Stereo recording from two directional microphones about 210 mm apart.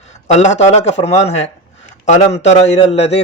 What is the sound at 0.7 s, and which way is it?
A man's voice, 30° left (ahead or behind).